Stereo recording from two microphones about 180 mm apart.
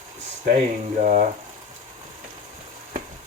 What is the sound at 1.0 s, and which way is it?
Speech, 45° right (ahead or behind).